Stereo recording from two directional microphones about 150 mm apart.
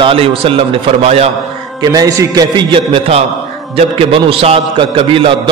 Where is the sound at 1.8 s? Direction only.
25° right (ahead or behind).